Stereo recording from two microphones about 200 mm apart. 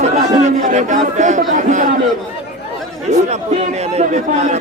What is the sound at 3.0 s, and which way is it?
Speech, 35° right (ahead or behind).